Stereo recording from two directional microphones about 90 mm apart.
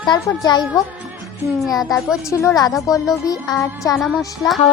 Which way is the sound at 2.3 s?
30° left (ahead or behind).